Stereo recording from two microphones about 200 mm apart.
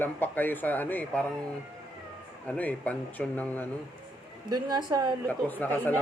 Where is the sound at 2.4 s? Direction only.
5° left (ahead or behind).